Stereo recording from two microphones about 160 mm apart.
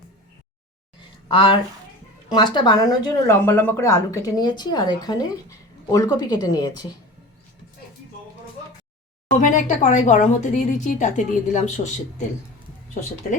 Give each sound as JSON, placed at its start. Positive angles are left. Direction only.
{"t": 1.3, "sound": "speech", "side_deg": 30}
{"t": 9.4, "sound": "a woman's voice", "side_deg": 50}
{"t": 13.0, "sound": "a woman's voice", "side_deg": 50}